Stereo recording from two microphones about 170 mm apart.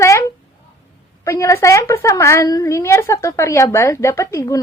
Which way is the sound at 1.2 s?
15° left (ahead or behind).